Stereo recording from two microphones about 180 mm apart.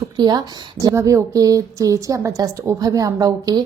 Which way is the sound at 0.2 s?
20° right (ahead or behind).